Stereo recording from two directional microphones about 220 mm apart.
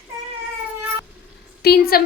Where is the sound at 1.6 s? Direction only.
45° left (ahead or behind).